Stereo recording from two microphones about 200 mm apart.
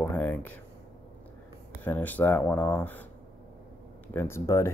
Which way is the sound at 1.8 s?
10° left (ahead or behind).